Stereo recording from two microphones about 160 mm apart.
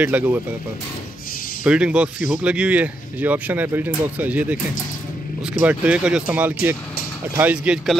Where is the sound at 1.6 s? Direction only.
5° right (ahead or behind).